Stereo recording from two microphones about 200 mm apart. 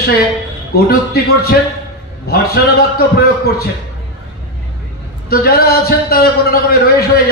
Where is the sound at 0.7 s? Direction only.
50° left (ahead or behind).